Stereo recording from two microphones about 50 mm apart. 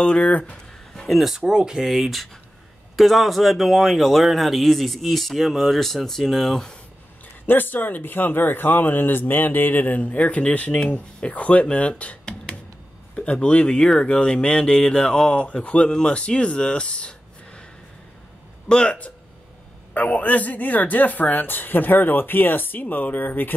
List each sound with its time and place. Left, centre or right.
0.0 s speech: left
0.9 s a sound: centre
1.5 s speech: centre
7.4 s speech: left
18.7 s speech: left